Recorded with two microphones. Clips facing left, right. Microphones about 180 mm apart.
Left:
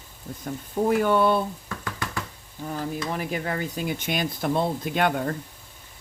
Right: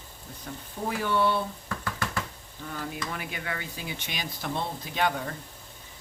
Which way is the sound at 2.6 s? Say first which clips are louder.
Left 6 dB; 35° left (ahead or behind).